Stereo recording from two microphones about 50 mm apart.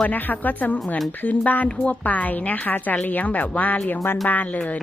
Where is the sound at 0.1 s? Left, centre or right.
Left.